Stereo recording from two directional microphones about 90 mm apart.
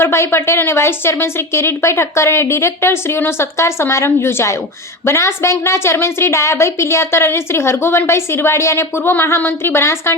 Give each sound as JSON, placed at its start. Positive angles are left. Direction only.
{"t": 0.0, "sound": "a woman's voice", "side_deg": 30}